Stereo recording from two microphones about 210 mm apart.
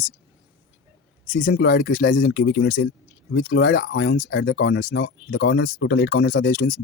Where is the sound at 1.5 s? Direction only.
50° left (ahead or behind).